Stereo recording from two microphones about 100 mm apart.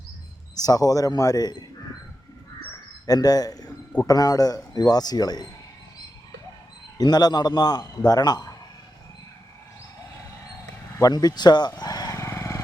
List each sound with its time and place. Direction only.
0.6 s a man's voice: 40° left (ahead or behind)
3.1 s a man's voice: 40° left (ahead or behind)
7.0 s a man's voice: 40° left (ahead or behind)
10.9 s speech: 40° left (ahead or behind)
11.8 s a sound: 40° left (ahead or behind)
12.2 s vehicle: 30° left (ahead or behind)